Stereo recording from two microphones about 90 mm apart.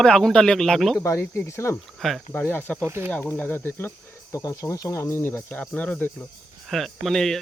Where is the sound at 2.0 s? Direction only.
Centre (ahead or behind).